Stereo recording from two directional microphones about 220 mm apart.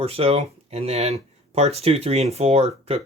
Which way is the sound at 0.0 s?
25° right (ahead or behind).